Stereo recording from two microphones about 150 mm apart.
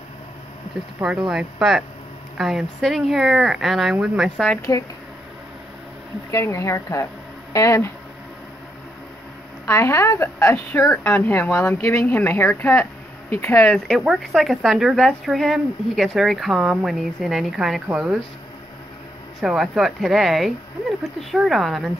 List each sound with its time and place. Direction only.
1.3 s speech: 5° right (ahead or behind)
4.6 s speech: 20° left (ahead or behind)
6.3 s speech: 20° left (ahead or behind)
9.7 s a woman's voice: 20° left (ahead or behind)
13.8 s speech: centre (ahead or behind)
19.4 s speech: 5° right (ahead or behind)